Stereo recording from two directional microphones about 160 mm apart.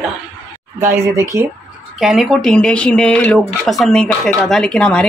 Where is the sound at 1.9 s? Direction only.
Centre (ahead or behind).